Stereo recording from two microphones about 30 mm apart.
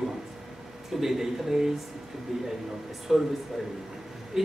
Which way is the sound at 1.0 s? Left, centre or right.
Centre.